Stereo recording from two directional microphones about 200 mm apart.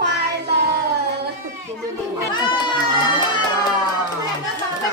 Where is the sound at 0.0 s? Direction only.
60° right (ahead or behind).